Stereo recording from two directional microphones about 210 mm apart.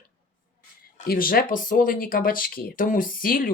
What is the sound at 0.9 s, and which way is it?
Speech, 45° left (ahead or behind).